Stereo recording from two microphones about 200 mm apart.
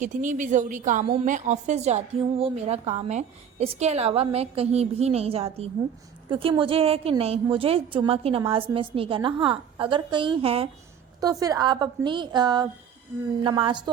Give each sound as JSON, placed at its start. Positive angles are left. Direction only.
{"t": 0.0, "sound": "a woman's voice", "side_deg": -40}
{"t": 11.2, "sound": "a woman's voice", "side_deg": -15}